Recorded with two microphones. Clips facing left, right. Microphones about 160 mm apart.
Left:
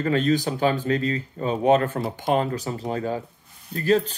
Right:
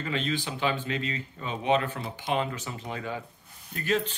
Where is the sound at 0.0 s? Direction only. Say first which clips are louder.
Left 9 dB; 45° left (ahead or behind).